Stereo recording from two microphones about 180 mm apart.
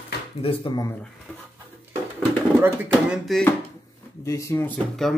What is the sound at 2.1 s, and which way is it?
Speech, 10° right (ahead or behind).